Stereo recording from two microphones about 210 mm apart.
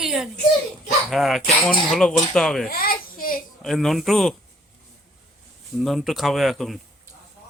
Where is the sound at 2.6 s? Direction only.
45° left (ahead or behind).